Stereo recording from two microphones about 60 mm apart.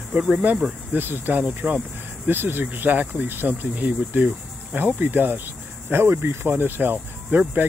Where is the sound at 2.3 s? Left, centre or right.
Right.